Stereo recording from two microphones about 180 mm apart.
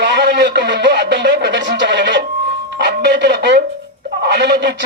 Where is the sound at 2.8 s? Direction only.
75° right (ahead or behind).